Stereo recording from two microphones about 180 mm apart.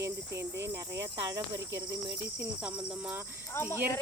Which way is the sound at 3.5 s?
15° left (ahead or behind).